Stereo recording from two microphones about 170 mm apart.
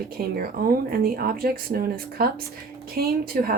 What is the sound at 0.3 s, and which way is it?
Speech, 60° right (ahead or behind).